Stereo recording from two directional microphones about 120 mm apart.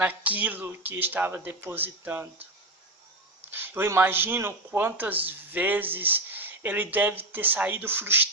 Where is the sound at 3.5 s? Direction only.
20° right (ahead or behind).